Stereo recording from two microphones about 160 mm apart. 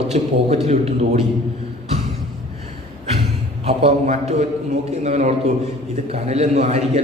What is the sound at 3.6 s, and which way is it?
Speech, 40° right (ahead or behind).